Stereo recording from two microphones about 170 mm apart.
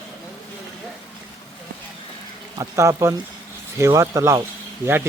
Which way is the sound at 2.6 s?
15° right (ahead or behind).